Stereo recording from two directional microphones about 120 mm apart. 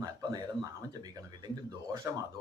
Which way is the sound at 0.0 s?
30° right (ahead or behind).